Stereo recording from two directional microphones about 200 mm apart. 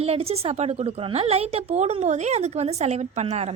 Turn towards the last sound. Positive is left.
turn(degrees=-30)  # may be behind; listen again after turning